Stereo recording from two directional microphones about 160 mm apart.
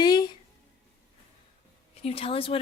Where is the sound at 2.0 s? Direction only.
35° left (ahead or behind).